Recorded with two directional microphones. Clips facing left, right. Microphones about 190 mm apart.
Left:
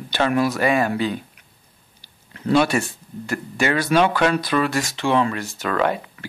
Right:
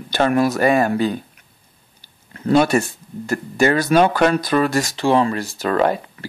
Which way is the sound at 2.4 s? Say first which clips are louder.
Right 3 dB; 45° right (ahead or behind).